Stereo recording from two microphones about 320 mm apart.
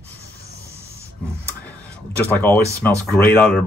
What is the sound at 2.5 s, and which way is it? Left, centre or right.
Speech, centre.